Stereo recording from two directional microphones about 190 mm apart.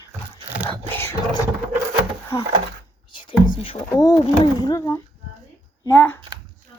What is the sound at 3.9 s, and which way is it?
Speech, 20° left (ahead or behind).